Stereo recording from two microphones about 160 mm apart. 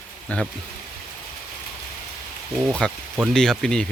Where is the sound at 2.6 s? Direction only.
5° left (ahead or behind).